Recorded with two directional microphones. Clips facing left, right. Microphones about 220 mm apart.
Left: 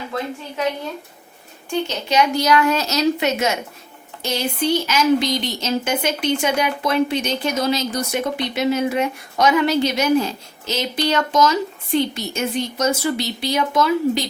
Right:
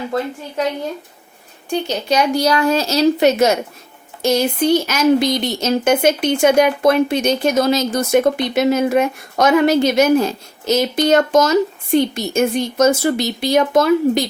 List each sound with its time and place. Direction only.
2.0 s a woman's voice: 35° right (ahead or behind)